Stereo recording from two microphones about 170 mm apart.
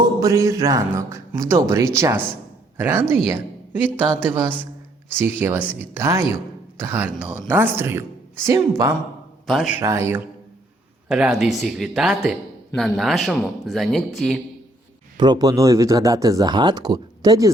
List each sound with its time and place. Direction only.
0.0 s a woman's voice: 20° right (ahead or behind)
9.5 s speech: 5° right (ahead or behind)
9.8 s a woman's voice: 15° right (ahead or behind)
11.1 s speech: 5° right (ahead or behind)
15.2 s speech: 25° right (ahead or behind)